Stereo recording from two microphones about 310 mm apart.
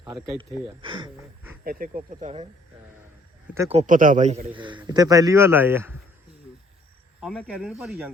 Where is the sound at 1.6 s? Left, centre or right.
Right.